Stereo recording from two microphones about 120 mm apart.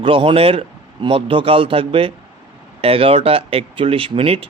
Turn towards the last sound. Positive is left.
turn(degrees=-50)  # may be behind; listen again after turning